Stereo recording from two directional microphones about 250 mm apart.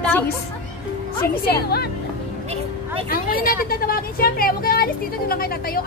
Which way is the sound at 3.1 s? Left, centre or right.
Left.